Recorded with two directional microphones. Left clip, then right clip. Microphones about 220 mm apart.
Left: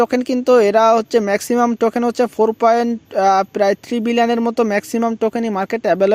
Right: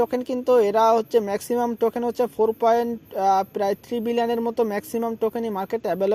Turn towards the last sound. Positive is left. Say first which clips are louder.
# left 8 dB
turn(degrees=35)  # may be behind; listen again after turning